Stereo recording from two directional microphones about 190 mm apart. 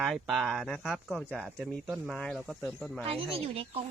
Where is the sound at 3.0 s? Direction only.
30° right (ahead or behind).